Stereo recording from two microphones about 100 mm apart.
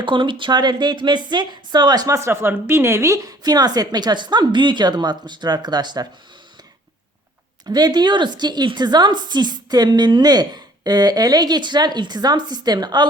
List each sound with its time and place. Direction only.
0.0 s a woman's voice: 55° right (ahead or behind)
2.1 s a woman's voice: 25° right (ahead or behind); by 6.1 s 45° right (ahead or behind)
7.6 s a woman's voice: 45° right (ahead or behind)